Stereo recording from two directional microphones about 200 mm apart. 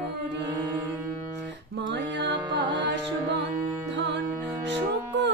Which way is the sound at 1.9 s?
65° right (ahead or behind).